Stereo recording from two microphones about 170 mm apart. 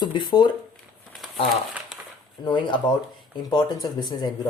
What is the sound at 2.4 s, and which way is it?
Speech, 25° left (ahead or behind).